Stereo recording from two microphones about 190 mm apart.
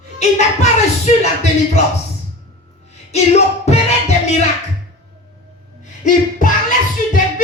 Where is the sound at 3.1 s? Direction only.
35° left (ahead or behind).